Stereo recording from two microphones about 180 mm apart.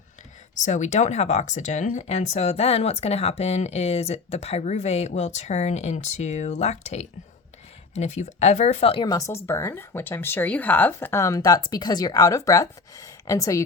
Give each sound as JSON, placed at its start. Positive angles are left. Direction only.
{"t": 0.6, "sound": "speech", "side_deg": 40}
{"t": 9.0, "sound": "speech", "side_deg": 20}